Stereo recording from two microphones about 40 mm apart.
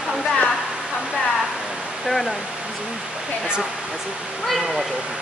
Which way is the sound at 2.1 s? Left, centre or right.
Centre.